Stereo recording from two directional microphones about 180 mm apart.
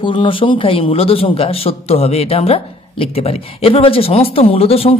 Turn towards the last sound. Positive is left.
turn(degrees=30)  # may be behind; listen again after turning